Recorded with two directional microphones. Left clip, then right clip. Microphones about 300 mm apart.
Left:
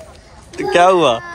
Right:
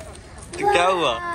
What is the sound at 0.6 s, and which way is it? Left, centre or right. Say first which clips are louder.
Speech: left 7 dB; left.